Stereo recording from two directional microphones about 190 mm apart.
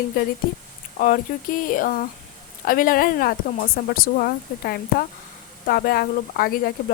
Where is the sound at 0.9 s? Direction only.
45° left (ahead or behind).